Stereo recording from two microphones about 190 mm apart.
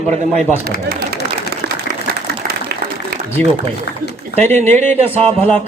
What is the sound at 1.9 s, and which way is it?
Applause, 50° right (ahead or behind).